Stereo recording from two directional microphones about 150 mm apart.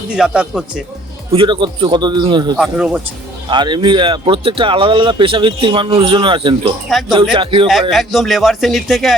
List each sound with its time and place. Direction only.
0.1 s speech: 5° right (ahead or behind)
1.3 s speech: 35° right (ahead or behind)
2.6 s speech: 5° right (ahead or behind)
3.5 s speech: 30° right (ahead or behind)
7.7 s speech: centre (ahead or behind)